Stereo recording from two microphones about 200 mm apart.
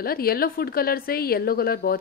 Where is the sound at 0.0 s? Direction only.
50° left (ahead or behind).